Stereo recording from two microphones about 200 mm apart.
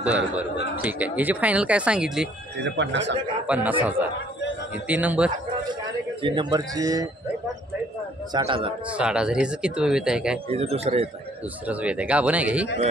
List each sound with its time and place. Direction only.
0.0 s speech: 5° right (ahead or behind)
2.6 s speech: 60° right (ahead or behind)
3.4 s speech: 5° right (ahead or behind)
4.8 s speech: 5° right (ahead or behind)
6.2 s speech: 20° right (ahead or behind)
8.3 s a man's voice: 20° right (ahead or behind)
8.9 s speech: 5° right (ahead or behind)
10.5 s a man's voice: 30° right (ahead or behind)
11.6 s speech: 5° right (ahead or behind)